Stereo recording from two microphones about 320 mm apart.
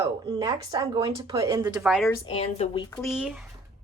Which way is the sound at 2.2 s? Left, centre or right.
Centre.